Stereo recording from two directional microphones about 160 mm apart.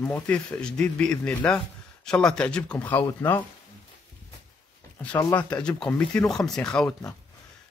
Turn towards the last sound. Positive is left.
turn(degrees=5)  # may be behind; listen again after turning